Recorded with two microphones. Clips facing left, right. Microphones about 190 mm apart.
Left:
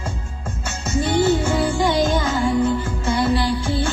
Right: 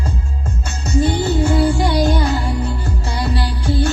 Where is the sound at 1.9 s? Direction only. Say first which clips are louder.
Right 2 dB; 40° right (ahead or behind).